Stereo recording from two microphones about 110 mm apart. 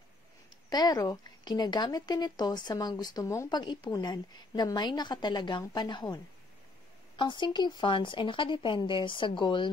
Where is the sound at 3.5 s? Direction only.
45° left (ahead or behind).